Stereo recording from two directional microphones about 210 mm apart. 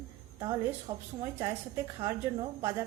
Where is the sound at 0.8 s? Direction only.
15° right (ahead or behind).